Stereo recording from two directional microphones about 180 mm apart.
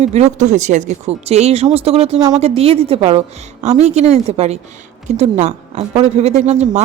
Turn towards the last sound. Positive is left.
turn(degrees=-40)  # may be behind; listen again after turning